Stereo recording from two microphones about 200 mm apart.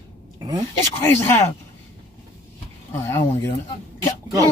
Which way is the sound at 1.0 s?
15° left (ahead or behind).